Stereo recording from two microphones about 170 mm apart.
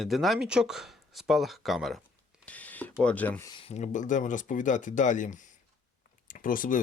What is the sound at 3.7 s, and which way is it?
Speech, 45° left (ahead or behind).